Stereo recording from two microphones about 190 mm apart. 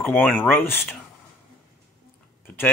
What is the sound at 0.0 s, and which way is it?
Speech, 10° left (ahead or behind).